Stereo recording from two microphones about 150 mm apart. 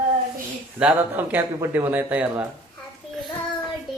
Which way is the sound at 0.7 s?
10° right (ahead or behind).